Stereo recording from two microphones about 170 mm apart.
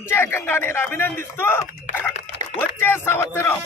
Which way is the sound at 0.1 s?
15° left (ahead or behind).